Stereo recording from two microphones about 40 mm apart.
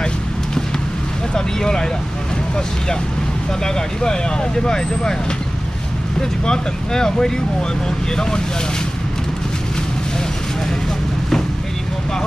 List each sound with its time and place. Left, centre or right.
1.3 s speech: centre
3.6 s speech: centre
6.4 s speech: centre